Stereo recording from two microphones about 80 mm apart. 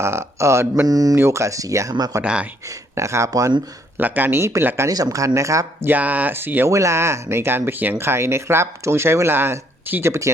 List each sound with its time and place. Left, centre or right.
0.0 s speech: right
0.9 s speech: right
1.1 s speech: right
2.2 s speech: centre
2.6 s speech: right
3.9 s speech: right
4.9 s speech: right
5.9 s speech: centre
6.7 s speech: right